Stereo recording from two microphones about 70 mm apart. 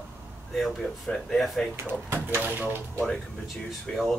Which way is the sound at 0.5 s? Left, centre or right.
Centre.